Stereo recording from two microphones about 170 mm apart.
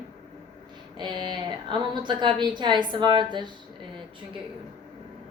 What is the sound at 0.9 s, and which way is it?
A woman's voice, 25° right (ahead or behind).